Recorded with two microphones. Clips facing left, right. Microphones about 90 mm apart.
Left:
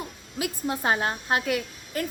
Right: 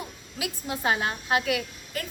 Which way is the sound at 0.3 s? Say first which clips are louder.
Left 4 dB; 35° left (ahead or behind).